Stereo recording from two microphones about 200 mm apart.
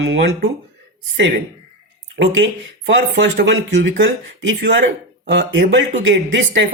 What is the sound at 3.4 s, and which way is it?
Speech, 65° right (ahead or behind).